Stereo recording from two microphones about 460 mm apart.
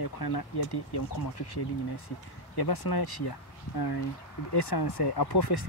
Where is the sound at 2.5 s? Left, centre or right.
Left.